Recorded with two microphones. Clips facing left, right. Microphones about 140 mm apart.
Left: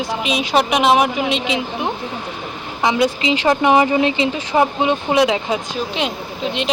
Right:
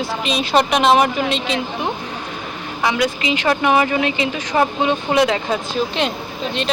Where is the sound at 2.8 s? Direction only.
25° left (ahead or behind).